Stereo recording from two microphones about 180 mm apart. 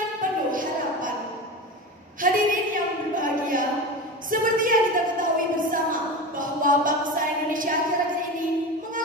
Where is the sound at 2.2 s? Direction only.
50° right (ahead or behind).